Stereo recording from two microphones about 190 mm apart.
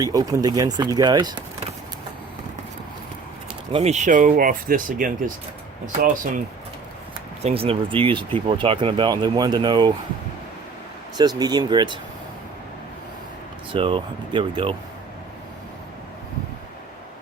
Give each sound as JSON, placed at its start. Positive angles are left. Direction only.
{"t": 0.0, "sound": "speech", "side_deg": -20}
{"t": 3.7, "sound": "speech", "side_deg": -35}
{"t": 7.4, "sound": "speech", "side_deg": -30}
{"t": 11.2, "sound": "speech", "side_deg": -20}
{"t": 13.7, "sound": "speech", "side_deg": -25}